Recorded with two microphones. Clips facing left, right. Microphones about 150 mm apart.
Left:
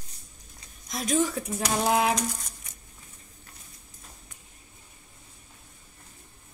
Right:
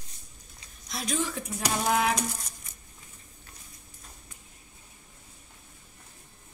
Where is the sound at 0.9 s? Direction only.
45° left (ahead or behind).